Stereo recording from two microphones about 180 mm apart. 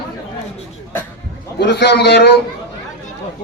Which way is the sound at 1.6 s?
70° left (ahead or behind).